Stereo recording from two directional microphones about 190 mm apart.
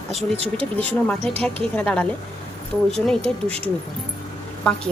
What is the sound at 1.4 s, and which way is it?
Speech, 5° left (ahead or behind).